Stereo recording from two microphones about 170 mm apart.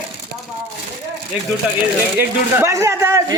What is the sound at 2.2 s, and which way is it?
Speech, 15° right (ahead or behind).